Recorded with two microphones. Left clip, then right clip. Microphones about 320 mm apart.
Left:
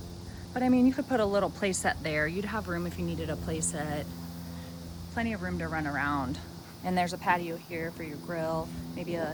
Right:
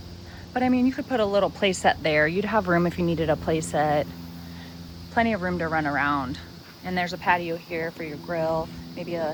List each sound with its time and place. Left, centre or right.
0.5 s speech: centre
5.1 s speech: centre